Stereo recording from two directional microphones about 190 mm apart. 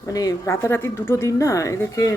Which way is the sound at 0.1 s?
20° left (ahead or behind).